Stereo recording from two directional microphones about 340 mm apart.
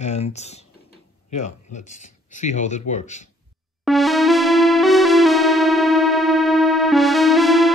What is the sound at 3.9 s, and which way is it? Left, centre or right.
Keyboard, centre.